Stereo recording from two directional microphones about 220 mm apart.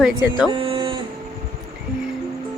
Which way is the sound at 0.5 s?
25° right (ahead or behind).